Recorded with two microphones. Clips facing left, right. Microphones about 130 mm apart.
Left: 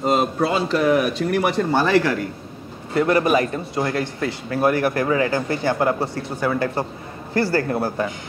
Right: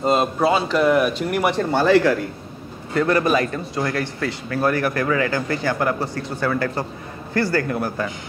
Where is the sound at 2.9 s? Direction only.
20° left (ahead or behind).